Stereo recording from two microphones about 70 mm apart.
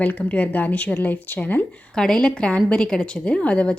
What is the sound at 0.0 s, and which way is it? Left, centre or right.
Speech, left.